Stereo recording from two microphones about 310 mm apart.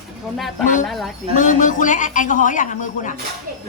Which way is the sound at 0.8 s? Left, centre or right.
Centre.